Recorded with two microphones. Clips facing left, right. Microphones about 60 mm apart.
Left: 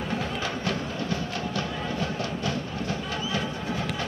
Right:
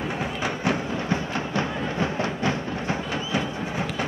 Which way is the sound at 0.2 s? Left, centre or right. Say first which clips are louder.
Right 3 dB; centre.